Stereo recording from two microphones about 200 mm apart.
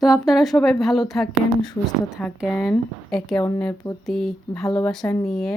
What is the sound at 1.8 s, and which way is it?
Speech, 20° left (ahead or behind).